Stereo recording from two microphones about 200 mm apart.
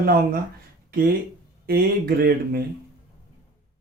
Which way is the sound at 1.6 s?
50° right (ahead or behind).